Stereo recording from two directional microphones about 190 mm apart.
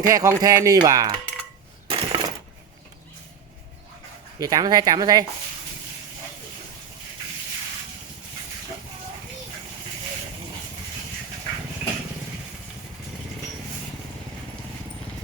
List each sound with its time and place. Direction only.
0.0 s speech: 15° right (ahead or behind)
1.9 s coin: 25° right (ahead or behind)
4.4 s speech: 20° right (ahead or behind)